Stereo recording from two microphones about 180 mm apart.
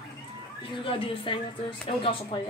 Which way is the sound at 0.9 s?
30° left (ahead or behind).